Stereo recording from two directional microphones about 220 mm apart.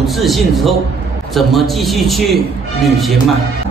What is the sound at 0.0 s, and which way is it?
A man's voice, centre (ahead or behind).